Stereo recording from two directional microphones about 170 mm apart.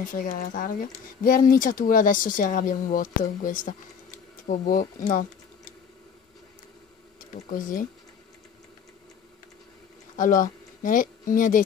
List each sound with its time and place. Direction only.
0.0 s speech: 55° left (ahead or behind)
7.2 s speech: 55° left (ahead or behind)
10.1 s speech: 50° left (ahead or behind)